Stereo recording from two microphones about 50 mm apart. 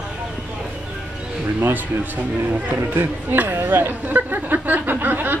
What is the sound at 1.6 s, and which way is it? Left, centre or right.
Speech, right.